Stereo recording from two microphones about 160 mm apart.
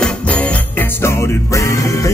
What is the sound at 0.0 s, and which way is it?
Music, 10° left (ahead or behind).